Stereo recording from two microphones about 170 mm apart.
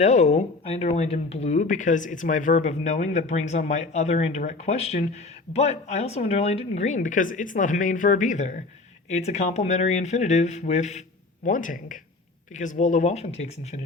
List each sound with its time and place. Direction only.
0.0 s speech: 45° left (ahead or behind)